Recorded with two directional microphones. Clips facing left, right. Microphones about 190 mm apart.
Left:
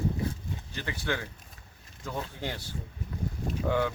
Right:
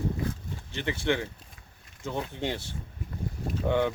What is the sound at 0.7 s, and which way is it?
Speech, 25° right (ahead or behind).